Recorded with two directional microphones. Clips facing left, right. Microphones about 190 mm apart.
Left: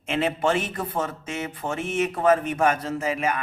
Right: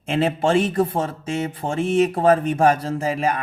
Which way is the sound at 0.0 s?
35° right (ahead or behind).